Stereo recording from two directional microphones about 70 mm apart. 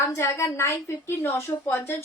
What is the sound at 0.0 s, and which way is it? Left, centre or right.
A woman's voice, left.